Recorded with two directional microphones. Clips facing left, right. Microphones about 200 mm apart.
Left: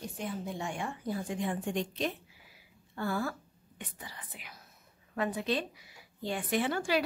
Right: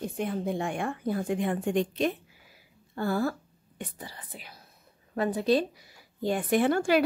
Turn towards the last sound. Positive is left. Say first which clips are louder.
# right 7 dB
turn(degrees=-50)  # may be behind; listen again after turning